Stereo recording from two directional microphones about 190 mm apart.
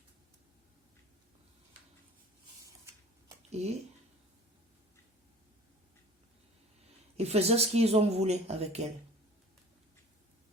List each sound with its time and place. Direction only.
3.5 s speech: 35° right (ahead or behind)
7.2 s speech: 35° right (ahead or behind)